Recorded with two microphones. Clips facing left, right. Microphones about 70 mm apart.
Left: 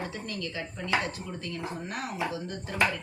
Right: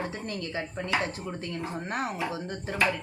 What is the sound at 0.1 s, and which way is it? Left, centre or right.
Speech, right.